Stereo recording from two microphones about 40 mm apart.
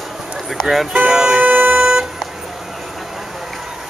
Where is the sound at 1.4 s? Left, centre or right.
Right.